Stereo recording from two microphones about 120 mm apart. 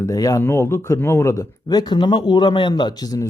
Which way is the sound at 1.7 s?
35° left (ahead or behind).